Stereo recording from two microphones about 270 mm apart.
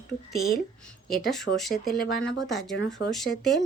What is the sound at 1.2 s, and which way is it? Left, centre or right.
Speech, centre.